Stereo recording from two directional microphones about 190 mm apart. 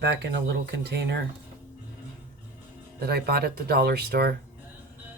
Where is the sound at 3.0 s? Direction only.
55° right (ahead or behind).